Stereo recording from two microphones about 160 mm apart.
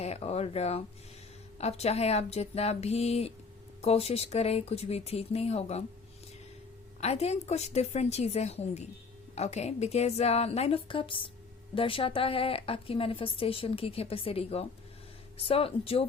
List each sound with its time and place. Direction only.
0.0 s a woman's voice: 40° left (ahead or behind)
7.0 s a woman's voice: 40° left (ahead or behind)